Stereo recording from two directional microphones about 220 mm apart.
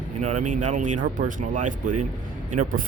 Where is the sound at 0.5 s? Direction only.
35° right (ahead or behind).